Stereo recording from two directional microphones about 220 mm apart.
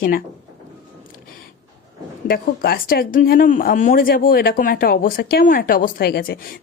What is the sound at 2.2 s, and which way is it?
Speech, 45° left (ahead or behind).